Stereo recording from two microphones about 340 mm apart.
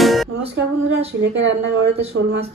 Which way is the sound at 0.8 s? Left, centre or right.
Right.